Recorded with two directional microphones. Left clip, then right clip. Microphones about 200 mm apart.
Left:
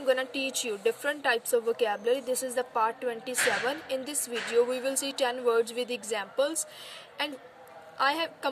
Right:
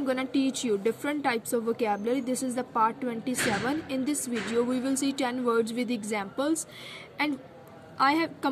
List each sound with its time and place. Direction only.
0.0 s a woman's voice: 20° left (ahead or behind)
8.0 s a woman's voice: 15° left (ahead or behind)